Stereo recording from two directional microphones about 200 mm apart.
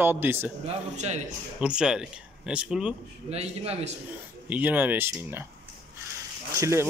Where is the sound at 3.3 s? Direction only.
30° right (ahead or behind).